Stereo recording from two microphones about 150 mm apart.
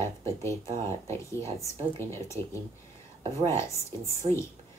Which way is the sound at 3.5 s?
20° left (ahead or behind).